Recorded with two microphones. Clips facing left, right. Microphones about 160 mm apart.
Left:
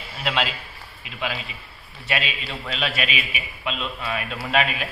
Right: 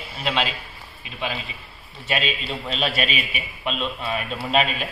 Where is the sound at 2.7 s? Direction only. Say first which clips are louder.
Right 2 dB; 35° right (ahead or behind).